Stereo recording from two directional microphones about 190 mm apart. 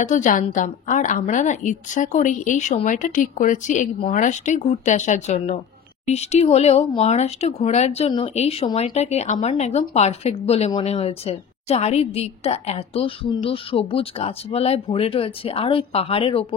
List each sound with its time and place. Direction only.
0.0 s speech: 40° left (ahead or behind)